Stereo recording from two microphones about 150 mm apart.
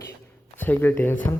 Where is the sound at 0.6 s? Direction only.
15° left (ahead or behind).